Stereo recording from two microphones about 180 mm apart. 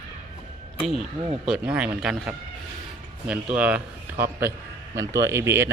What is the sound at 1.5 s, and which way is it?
A man's voice, 5° right (ahead or behind).